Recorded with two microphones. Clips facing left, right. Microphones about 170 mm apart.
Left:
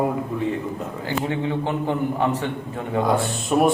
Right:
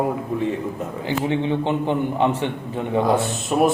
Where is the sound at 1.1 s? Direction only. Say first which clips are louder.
Right 3 dB; 20° right (ahead or behind).